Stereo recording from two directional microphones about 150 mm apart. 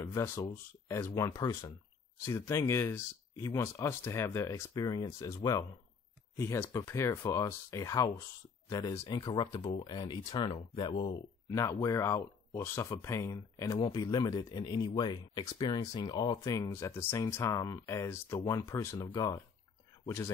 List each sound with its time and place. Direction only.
0.0 s speech: 20° left (ahead or behind)
18.9 s speech: 30° left (ahead or behind)